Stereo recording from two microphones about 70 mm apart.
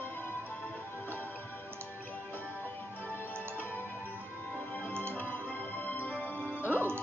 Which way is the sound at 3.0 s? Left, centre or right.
Left.